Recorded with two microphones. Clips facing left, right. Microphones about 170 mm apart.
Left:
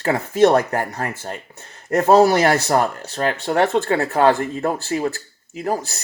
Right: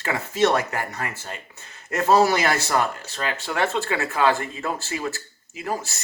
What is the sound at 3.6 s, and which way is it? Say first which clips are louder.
A man's voice: left 6 dB; 55° left (ahead or behind).